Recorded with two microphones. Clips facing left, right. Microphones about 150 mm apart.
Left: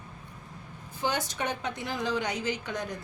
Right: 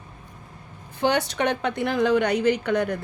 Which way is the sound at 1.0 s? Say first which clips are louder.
Right 8 dB; 70° right (ahead or behind).